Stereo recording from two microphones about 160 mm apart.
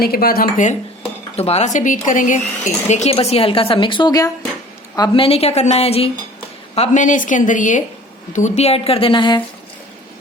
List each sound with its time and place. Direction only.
0.0 s speech: 70° left (ahead or behind); by 0.8 s 55° left (ahead or behind)
1.4 s a woman's voice: 40° left (ahead or behind)
2.9 s a woman's voice: 40° left (ahead or behind)